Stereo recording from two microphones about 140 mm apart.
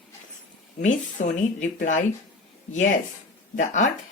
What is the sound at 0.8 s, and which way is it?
Speech, 65° left (ahead or behind).